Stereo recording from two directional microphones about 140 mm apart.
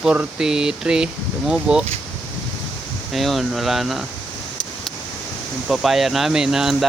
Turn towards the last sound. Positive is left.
turn(degrees=-5)  # may be behind; listen again after turning